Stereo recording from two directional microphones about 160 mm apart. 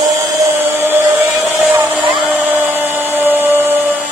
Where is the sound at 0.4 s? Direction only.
15° right (ahead or behind).